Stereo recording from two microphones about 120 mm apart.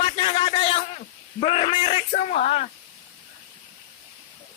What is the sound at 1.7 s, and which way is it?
Speech, 45° left (ahead or behind).